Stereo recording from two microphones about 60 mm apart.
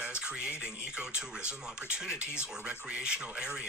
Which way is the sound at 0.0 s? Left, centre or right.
Centre.